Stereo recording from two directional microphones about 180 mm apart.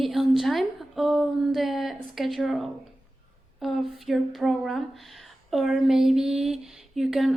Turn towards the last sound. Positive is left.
turn(degrees=0)  # may be behind; listen again after turning